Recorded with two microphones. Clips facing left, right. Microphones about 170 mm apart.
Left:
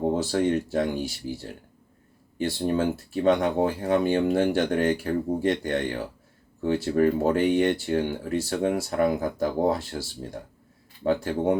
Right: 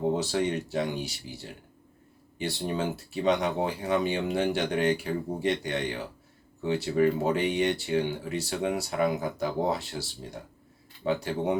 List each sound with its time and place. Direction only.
0.2 s speech: 50° left (ahead or behind)